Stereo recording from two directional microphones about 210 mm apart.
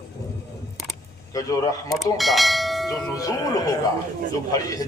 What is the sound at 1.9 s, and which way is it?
Bell, centre (ahead or behind).